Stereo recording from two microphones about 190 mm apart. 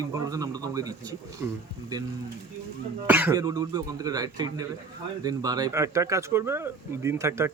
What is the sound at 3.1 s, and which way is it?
Speech, 10° right (ahead or behind).